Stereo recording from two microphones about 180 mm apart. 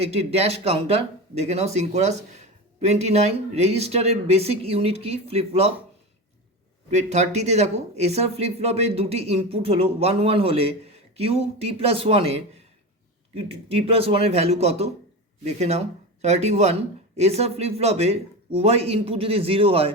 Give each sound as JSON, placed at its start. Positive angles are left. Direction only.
{"t": 0.0, "sound": "speech", "side_deg": -35}
{"t": 6.9, "sound": "speech", "side_deg": -40}